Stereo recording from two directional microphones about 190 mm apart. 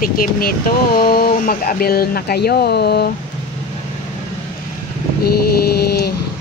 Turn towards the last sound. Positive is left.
turn(degrees=55)  # may be behind; listen again after turning